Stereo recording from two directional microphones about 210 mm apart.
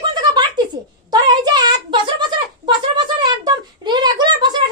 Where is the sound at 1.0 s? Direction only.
20° right (ahead or behind).